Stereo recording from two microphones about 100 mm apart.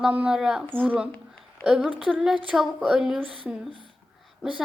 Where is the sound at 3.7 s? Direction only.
55° right (ahead or behind).